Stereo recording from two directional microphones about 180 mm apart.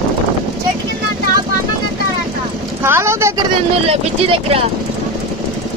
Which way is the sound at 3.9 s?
30° right (ahead or behind).